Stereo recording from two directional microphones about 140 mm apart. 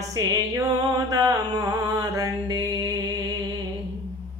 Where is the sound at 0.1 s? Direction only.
25° right (ahead or behind).